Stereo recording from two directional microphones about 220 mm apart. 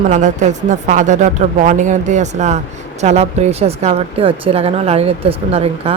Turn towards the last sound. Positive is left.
turn(degrees=-25)  # may be behind; listen again after turning